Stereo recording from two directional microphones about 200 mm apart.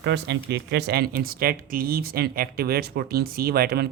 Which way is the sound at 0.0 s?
60° right (ahead or behind).